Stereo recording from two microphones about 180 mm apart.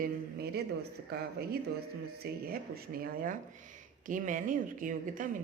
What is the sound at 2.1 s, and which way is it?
Speech, 60° right (ahead or behind).